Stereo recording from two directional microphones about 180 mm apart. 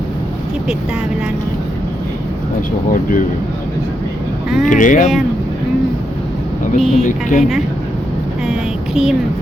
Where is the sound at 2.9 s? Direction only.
50° left (ahead or behind).